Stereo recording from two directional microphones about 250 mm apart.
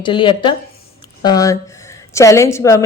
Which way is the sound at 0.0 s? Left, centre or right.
Centre.